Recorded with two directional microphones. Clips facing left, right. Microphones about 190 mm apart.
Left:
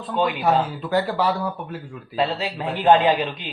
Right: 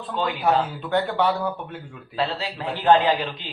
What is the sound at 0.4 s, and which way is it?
Speech, 5° left (ahead or behind).